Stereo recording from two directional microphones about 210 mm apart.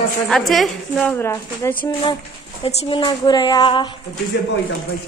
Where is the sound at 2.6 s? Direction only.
25° left (ahead or behind).